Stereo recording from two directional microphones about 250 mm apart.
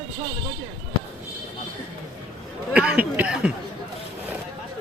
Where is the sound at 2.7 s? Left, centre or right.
Centre.